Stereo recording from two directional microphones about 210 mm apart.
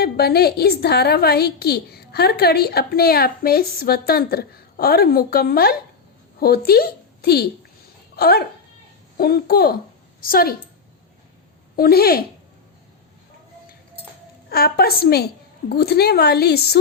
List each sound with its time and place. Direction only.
0.0 s a woman's voice: 50° left (ahead or behind)
11.8 s a woman's voice: 45° left (ahead or behind)
14.5 s a woman's voice: 45° left (ahead or behind)